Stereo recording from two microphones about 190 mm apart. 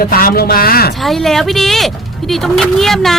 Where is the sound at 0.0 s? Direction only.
50° left (ahead or behind).